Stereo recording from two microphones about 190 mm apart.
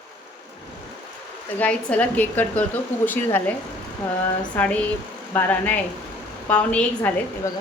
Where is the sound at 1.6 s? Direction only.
5° left (ahead or behind).